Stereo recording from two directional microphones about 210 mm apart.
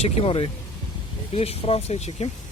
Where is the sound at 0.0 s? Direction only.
30° left (ahead or behind).